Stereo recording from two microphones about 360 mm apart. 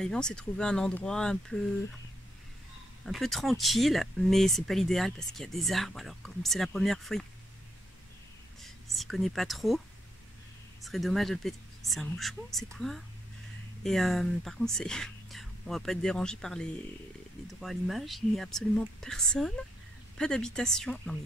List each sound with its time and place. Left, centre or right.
0.0 s speech: centre
3.1 s speech: centre
8.6 s speech: centre
10.8 s speech: centre